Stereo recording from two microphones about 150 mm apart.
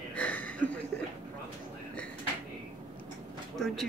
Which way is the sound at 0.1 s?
10° left (ahead or behind).